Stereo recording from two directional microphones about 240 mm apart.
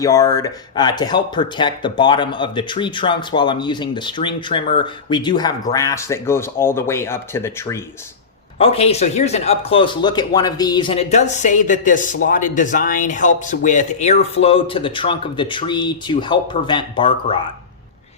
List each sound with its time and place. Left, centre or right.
0.0 s speech: centre
8.5 s speech: left